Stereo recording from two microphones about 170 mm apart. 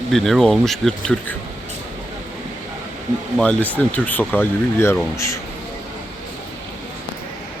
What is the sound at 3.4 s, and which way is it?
Speech, 5° left (ahead or behind).